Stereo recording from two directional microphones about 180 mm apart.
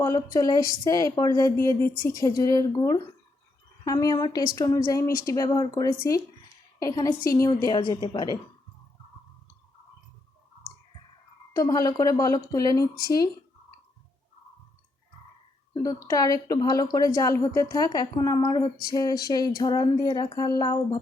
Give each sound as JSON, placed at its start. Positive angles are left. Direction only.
{"t": 0.0, "sound": "speech", "side_deg": 15}
{"t": 11.5, "sound": "speech", "side_deg": 20}
{"t": 15.7, "sound": "speech", "side_deg": 20}